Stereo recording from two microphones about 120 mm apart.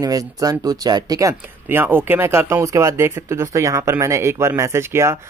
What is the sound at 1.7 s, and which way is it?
Speech, 20° right (ahead or behind).